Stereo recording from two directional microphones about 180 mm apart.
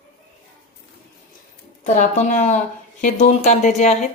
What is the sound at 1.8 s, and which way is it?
Speech, 40° left (ahead or behind).